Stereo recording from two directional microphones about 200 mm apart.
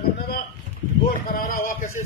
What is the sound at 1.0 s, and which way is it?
Speech, 45° left (ahead or behind).